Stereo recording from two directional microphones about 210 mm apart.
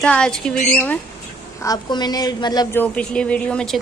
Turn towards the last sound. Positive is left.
turn(degrees=5)  # may be behind; listen again after turning